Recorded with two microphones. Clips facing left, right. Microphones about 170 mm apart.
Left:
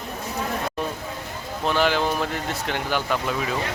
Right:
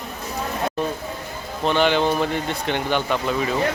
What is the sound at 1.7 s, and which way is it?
Speech, 5° left (ahead or behind).